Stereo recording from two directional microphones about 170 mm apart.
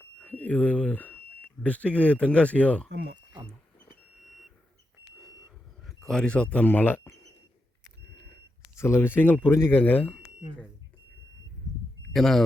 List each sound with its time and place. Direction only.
0.2 s speech: 10° left (ahead or behind)
2.9 s speech: 70° right (ahead or behind)
5.8 s speech: centre (ahead or behind)
8.7 s speech: 15° left (ahead or behind)
12.1 s speech: centre (ahead or behind)